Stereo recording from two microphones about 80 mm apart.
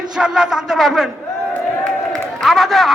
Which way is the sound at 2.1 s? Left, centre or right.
Centre.